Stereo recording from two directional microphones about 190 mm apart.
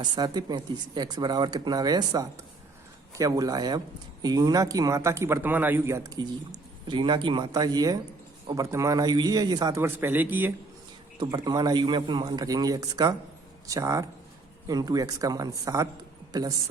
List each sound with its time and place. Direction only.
0.0 s a man's voice: 20° right (ahead or behind)
11.2 s a man's voice: 20° right (ahead or behind)